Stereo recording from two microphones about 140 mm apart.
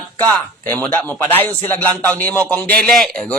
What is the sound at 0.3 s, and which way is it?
A man's voice, 15° left (ahead or behind).